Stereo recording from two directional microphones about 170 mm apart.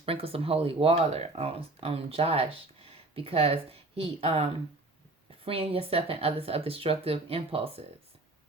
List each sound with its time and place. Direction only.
0.0 s speech: 35° right (ahead or behind)
5.5 s speech: 35° right (ahead or behind)